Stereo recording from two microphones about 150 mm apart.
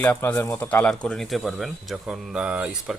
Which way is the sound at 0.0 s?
10° left (ahead or behind).